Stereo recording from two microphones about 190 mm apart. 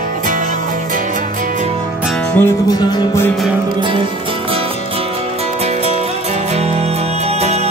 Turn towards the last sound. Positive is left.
turn(degrees=-35)  # may be behind; listen again after turning